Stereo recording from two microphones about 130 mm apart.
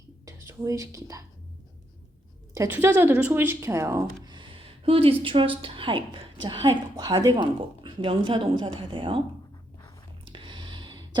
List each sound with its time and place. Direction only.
0.3 s speech: 25° right (ahead or behind)
2.6 s a woman's voice: 15° right (ahead or behind)
4.3 s speech: 40° right (ahead or behind)
10.2 s a sound: 40° right (ahead or behind)